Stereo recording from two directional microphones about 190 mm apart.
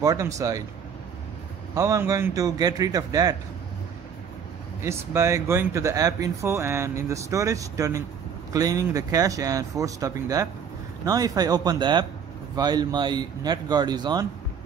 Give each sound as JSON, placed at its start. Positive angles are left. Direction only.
{"t": 0.0, "sound": "speech", "side_deg": -20}
{"t": 1.8, "sound": "speech", "side_deg": -15}
{"t": 4.8, "sound": "speech", "side_deg": -15}